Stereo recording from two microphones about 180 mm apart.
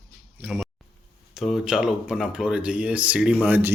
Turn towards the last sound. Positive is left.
turn(degrees=-10)  # may be behind; listen again after turning